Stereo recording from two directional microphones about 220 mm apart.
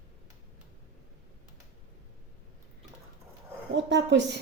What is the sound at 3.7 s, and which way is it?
Speech, 55° right (ahead or behind).